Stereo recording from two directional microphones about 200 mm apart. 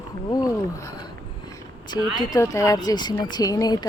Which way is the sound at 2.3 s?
15° left (ahead or behind).